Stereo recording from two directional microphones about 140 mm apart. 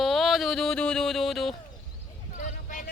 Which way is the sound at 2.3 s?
65° left (ahead or behind).